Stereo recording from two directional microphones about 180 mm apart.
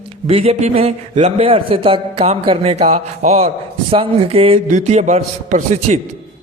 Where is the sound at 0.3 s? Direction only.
35° right (ahead or behind).